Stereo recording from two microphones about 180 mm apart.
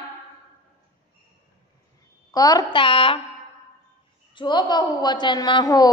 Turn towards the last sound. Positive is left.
turn(degrees=20)  # may be behind; listen again after turning